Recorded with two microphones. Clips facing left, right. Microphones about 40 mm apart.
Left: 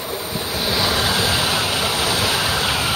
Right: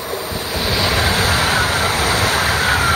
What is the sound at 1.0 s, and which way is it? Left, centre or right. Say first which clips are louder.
Vehicle: right 3 dB; right.